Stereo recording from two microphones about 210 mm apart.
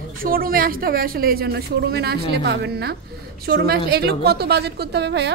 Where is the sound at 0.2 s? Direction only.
45° right (ahead or behind).